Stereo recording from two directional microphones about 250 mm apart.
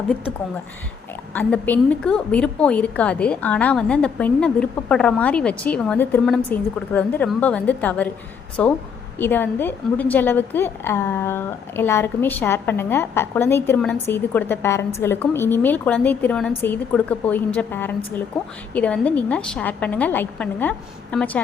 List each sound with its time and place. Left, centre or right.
1.3 s a woman's voice: centre